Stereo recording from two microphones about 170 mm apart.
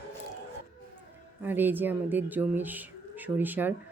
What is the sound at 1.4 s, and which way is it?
Speech, 10° right (ahead or behind).